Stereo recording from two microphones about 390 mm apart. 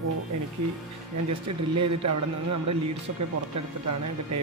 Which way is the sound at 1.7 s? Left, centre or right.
Right.